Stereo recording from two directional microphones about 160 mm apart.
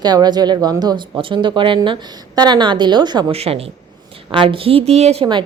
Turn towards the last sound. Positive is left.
turn(degrees=-30)  # may be behind; listen again after turning